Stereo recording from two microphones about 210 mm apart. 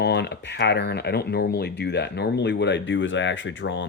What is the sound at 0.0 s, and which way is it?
Speech, 55° left (ahead or behind).